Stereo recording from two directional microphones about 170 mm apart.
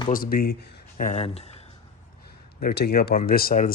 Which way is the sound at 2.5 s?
70° left (ahead or behind).